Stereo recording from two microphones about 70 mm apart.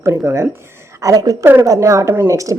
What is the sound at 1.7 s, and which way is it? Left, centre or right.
Speech, right.